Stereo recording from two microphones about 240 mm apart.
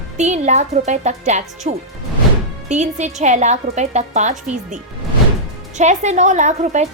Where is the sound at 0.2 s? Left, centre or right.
Right.